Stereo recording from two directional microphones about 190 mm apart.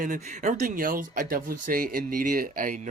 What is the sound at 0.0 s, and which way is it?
Speech, 40° right (ahead or behind).